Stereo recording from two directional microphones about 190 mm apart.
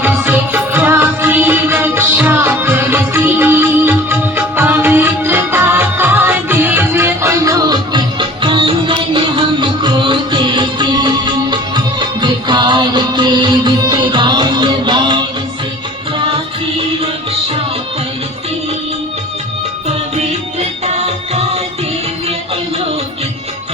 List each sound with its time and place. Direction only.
0.0 s music: 10° right (ahead or behind)
20.1 s music: 35° right (ahead or behind)